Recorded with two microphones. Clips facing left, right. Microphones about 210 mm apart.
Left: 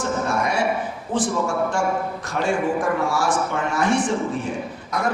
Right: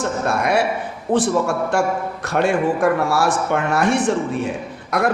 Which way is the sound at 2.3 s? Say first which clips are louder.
Right 4 dB; 65° right (ahead or behind).